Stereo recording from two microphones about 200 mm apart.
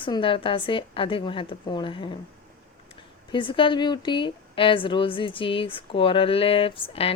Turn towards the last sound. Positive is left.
turn(degrees=25)  # may be behind; listen again after turning